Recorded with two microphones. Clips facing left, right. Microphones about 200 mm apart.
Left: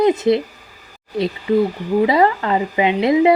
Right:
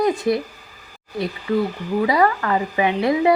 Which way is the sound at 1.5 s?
20° left (ahead or behind).